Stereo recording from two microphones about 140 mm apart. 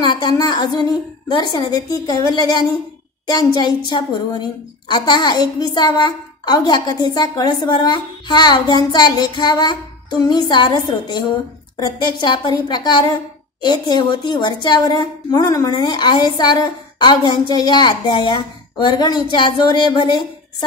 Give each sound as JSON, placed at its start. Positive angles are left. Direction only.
{"t": 0.0, "sound": "a woman's voice", "side_deg": 30}